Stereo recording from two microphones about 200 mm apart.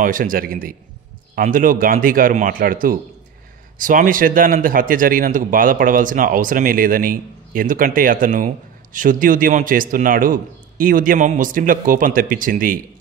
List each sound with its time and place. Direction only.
0.0 s a man's voice: 45° right (ahead or behind)